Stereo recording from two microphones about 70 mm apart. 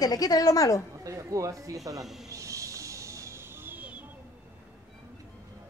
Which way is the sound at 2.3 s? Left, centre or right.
Right.